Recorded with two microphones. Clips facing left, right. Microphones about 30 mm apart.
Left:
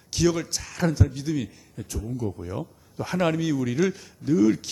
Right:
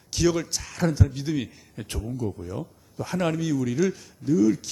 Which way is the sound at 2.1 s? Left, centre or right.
Centre.